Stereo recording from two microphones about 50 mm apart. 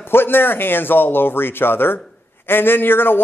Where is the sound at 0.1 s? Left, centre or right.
Left.